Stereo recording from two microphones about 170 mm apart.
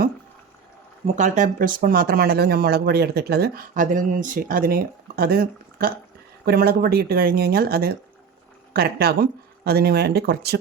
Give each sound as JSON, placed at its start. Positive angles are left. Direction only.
{"t": 1.0, "sound": "speech", "side_deg": -45}